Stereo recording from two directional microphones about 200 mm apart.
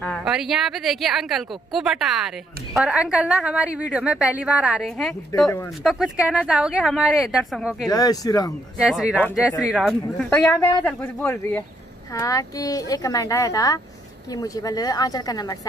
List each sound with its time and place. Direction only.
0.0 s speech: centre (ahead or behind)
7.9 s a woman's voice: 20° left (ahead or behind)
8.8 s a woman's voice: 5° right (ahead or behind); by 15.5 s 20° left (ahead or behind)